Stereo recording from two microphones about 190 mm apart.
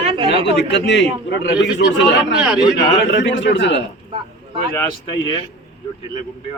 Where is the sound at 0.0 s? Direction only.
30° right (ahead or behind).